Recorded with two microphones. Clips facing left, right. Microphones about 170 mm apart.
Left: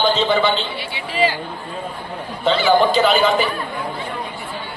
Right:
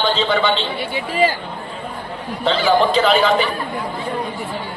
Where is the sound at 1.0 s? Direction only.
45° right (ahead or behind).